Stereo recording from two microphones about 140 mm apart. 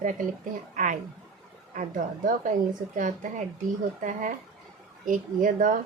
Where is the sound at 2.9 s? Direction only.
65° right (ahead or behind).